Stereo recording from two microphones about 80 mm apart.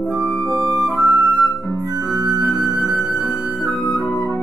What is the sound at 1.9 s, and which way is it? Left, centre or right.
Organ, right.